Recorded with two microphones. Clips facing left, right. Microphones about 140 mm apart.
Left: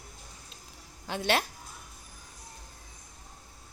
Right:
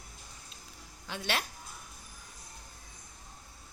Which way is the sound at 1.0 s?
45° left (ahead or behind).